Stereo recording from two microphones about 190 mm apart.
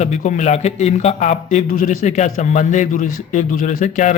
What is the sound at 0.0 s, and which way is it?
A man's voice, 40° left (ahead or behind).